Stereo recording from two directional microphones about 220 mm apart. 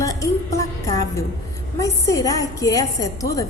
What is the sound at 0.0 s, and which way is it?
Music, 15° left (ahead or behind).